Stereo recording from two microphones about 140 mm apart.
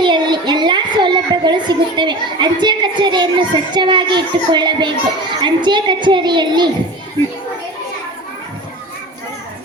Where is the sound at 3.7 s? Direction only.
35° right (ahead or behind).